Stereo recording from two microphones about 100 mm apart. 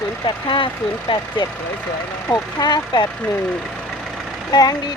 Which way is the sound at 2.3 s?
40° left (ahead or behind).